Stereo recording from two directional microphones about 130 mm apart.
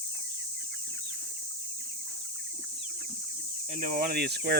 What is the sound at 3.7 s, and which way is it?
Speech, 90° right.